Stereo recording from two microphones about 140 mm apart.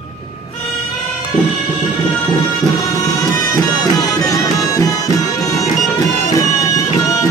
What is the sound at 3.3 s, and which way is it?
Music, 25° left (ahead or behind).